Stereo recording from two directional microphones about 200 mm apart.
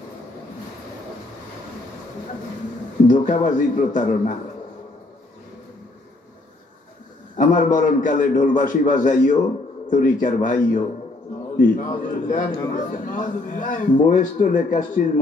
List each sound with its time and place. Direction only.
3.1 s a man's voice: 40° left (ahead or behind)
7.3 s a man's voice: 40° left (ahead or behind)